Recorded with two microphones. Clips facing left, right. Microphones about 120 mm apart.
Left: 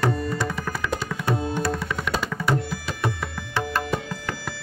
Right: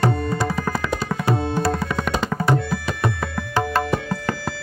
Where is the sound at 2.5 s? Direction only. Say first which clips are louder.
Right 4 dB; 65° right (ahead or behind).